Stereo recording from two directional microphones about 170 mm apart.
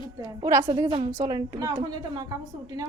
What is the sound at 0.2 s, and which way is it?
A woman's voice, 20° right (ahead or behind).